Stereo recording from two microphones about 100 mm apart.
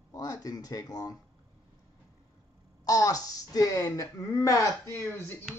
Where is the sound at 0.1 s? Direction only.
40° left (ahead or behind).